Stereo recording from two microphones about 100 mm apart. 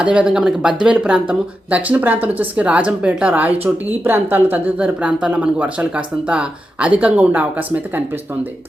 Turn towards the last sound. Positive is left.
turn(degrees=-15)  # may be behind; listen again after turning